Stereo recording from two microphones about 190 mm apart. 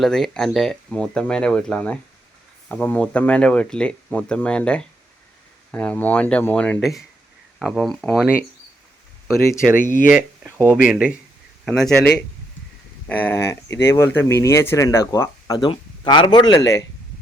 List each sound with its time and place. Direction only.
0.0 s speech: centre (ahead or behind)
9.7 s speech: 45° left (ahead or behind)
10.1 s speech: 10° right (ahead or behind)
11.6 s speech: 5° left (ahead or behind)